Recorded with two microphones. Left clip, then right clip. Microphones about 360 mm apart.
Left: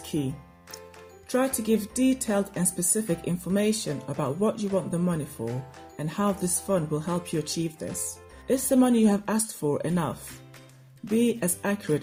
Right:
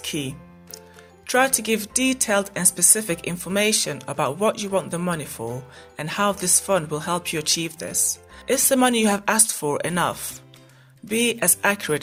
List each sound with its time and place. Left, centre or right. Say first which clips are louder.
1.3 s speech: right 6 dB; right
11.2 s speech: right 6 dB; right